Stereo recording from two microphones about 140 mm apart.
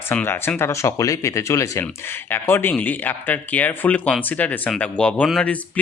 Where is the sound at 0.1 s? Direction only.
15° left (ahead or behind).